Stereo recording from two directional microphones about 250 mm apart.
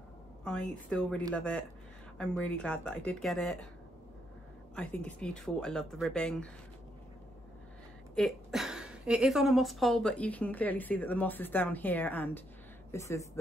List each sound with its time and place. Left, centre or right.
0.4 s a woman's voice: centre
4.7 s a woman's voice: centre
8.2 s a woman's voice: centre